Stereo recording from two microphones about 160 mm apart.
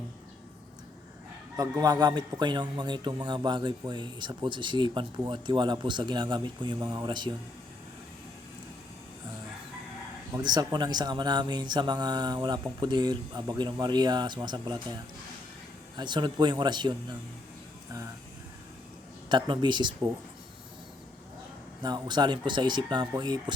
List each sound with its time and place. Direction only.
1.5 s a man's voice: 20° right (ahead or behind)
10.3 s a man's voice: 25° right (ahead or behind)
16.0 s a man's voice: 30° right (ahead or behind)
19.3 s a man's voice: 30° right (ahead or behind)
21.8 s a man's voice: 25° right (ahead or behind)